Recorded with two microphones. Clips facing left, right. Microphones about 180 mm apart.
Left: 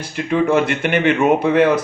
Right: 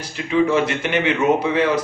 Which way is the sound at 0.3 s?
55° left (ahead or behind).